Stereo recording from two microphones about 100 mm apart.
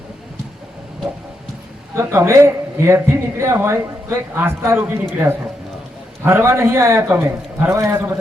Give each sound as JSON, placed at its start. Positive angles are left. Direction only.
{"t": 2.0, "sound": "speech", "side_deg": -30}